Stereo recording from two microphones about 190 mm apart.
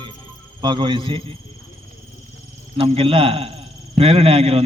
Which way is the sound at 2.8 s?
30° right (ahead or behind).